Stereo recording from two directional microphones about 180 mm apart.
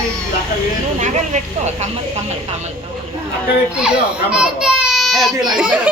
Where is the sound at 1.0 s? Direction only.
40° right (ahead or behind).